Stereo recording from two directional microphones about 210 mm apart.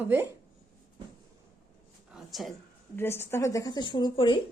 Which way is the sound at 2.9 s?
10° left (ahead or behind).